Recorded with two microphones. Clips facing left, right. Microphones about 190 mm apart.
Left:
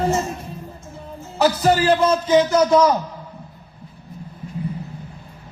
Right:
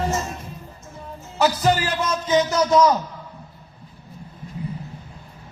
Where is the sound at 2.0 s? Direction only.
30° left (ahead or behind).